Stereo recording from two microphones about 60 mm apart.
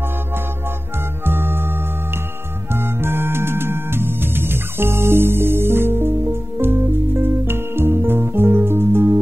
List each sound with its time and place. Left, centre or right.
1.2 s music: right